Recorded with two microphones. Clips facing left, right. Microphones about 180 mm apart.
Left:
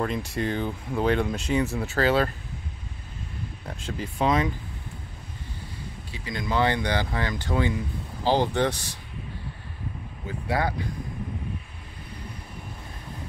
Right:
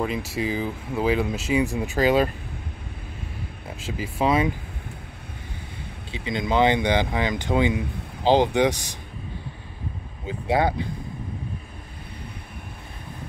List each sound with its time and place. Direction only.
0.0 s speech: 5° right (ahead or behind)
3.6 s speech: 5° right (ahead or behind)
6.1 s speech: 20° right (ahead or behind)
10.2 s speech: 25° right (ahead or behind)